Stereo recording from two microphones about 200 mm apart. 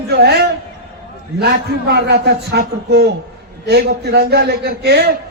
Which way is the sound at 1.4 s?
55° right (ahead or behind).